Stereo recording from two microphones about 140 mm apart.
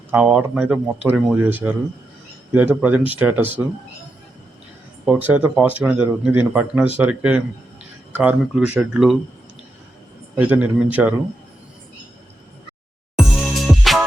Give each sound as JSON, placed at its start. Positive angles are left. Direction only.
{"t": 0.1, "sound": "speech", "side_deg": -10}
{"t": 5.0, "sound": "speech", "side_deg": -10}
{"t": 10.3, "sound": "speech", "side_deg": -10}
{"t": 13.1, "sound": "music", "side_deg": 0}